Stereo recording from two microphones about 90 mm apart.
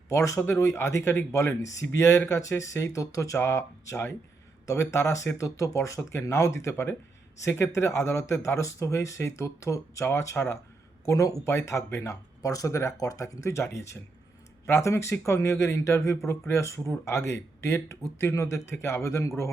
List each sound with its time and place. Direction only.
0.1 s speech: 35° left (ahead or behind)